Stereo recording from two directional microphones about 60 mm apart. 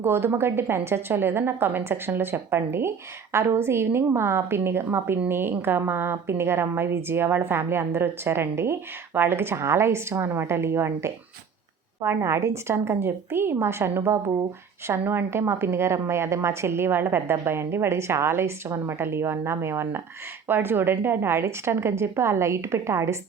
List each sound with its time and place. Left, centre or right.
0.0 s a woman's voice: right